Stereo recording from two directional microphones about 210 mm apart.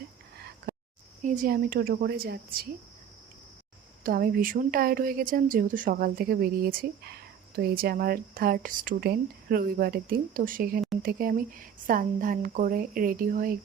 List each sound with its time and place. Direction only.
1.2 s speech: 40° right (ahead or behind)
4.0 s a woman's voice: 45° right (ahead or behind)